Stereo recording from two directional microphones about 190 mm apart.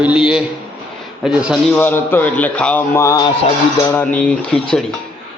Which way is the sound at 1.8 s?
10° left (ahead or behind).